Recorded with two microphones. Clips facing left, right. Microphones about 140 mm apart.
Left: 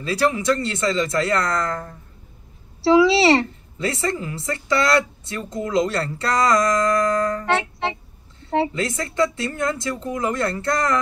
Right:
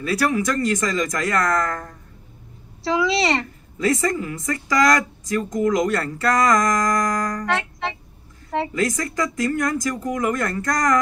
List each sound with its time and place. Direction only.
0.0 s speech: 25° left (ahead or behind)
2.8 s a woman's voice: 30° left (ahead or behind)